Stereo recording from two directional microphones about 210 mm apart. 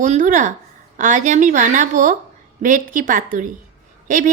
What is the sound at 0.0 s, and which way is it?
A woman's voice, 40° right (ahead or behind).